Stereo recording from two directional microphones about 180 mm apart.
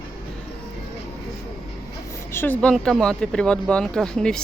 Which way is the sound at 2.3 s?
10° left (ahead or behind).